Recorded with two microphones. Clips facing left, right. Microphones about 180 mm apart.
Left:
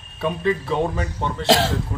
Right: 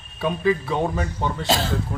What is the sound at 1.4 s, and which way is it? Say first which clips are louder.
Speech: left 7 dB; 85° left.